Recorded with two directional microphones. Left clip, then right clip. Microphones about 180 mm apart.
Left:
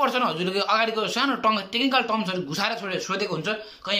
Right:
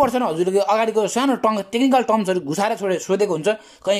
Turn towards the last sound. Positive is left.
turn(degrees=-45)  # may be behind; listen again after turning